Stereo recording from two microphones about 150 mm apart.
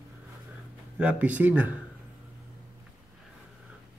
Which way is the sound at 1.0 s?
10° right (ahead or behind).